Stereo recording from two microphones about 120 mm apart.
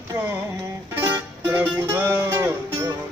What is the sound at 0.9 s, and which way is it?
Music, 20° right (ahead or behind).